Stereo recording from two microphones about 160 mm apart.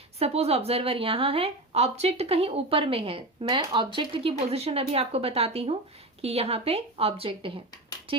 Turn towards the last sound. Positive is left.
turn(degrees=-35)  # may be behind; listen again after turning